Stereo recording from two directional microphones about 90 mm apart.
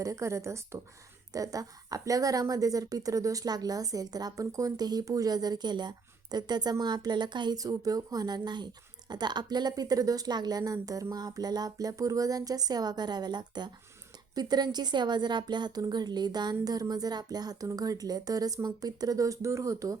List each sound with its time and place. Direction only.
0.0 s a woman's voice: 35° right (ahead or behind)